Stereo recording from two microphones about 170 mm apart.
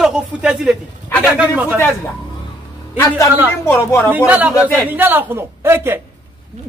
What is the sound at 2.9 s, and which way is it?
Speech, 15° left (ahead or behind).